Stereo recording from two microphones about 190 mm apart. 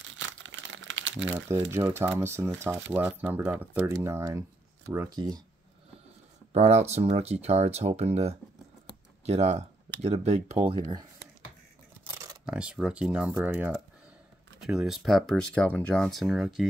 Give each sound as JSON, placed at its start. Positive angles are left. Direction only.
{"t": 0.1, "sound": "crumpling", "side_deg": -85}
{"t": 1.5, "sound": "speech", "side_deg": -15}
{"t": 6.5, "sound": "speech", "side_deg": -35}
{"t": 10.7, "sound": "speech", "side_deg": -25}
{"t": 12.0, "sound": "a sound", "side_deg": -15}
{"t": 12.4, "sound": "speech", "side_deg": -5}